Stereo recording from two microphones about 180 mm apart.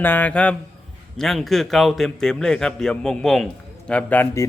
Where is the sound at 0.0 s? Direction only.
10° left (ahead or behind).